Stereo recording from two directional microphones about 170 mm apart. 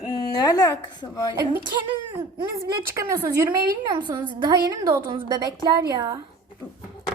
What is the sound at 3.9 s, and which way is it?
Speech, 25° right (ahead or behind).